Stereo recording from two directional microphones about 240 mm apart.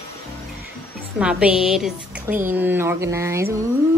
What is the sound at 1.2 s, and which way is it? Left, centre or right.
A woman's voice, centre.